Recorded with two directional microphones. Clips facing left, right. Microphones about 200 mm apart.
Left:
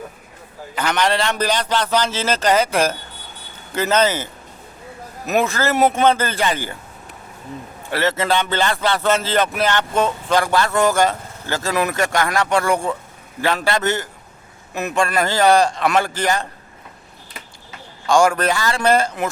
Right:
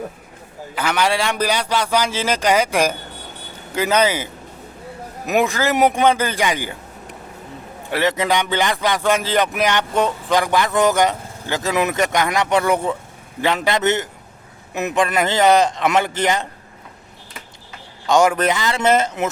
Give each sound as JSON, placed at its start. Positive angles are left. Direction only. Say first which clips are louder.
{"t": 0.8, "sound": "speech", "louder": "even", "side_deg": -10}
{"t": 7.9, "sound": "a man's voice", "louder": "right 1 dB", "side_deg": -15}
{"t": 18.0, "sound": "a man's voice", "louder": "even", "side_deg": -20}